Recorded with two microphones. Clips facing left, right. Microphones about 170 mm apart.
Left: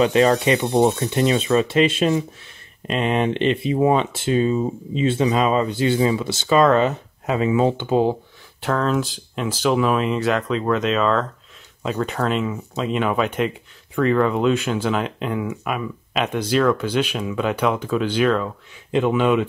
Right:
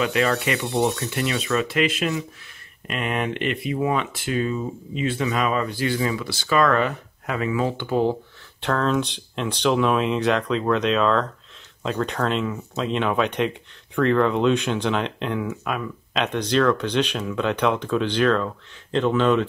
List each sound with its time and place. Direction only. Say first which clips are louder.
0.0 s speech: left 6 dB; 35° left (ahead or behind)
0.7 s speech: left 3 dB; 15° left (ahead or behind)
1.1 s speech: left 6 dB; 30° left (ahead or behind)
8.5 s speech: left 1 dB; 5° left (ahead or behind)